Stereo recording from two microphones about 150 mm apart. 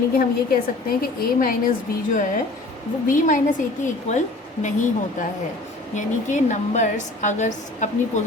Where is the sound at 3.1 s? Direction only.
60° left (ahead or behind).